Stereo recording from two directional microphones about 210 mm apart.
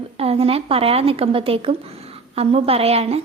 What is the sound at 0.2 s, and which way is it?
A woman's voice, 30° right (ahead or behind).